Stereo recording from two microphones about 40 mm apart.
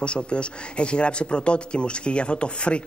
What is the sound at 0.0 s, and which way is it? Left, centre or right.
Speech, left.